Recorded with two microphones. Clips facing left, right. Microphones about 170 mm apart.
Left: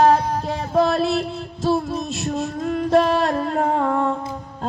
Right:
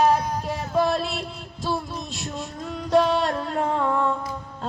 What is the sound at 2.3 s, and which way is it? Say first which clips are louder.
Female singing: left 11 dB; 55° left (ahead or behind).